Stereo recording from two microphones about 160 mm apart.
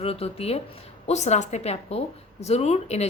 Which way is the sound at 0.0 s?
40° left (ahead or behind).